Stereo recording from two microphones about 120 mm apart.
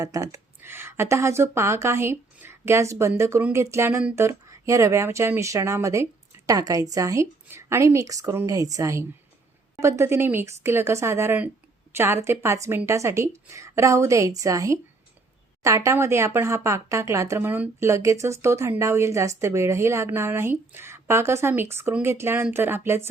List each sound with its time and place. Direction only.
0.0 s speech: 30° right (ahead or behind)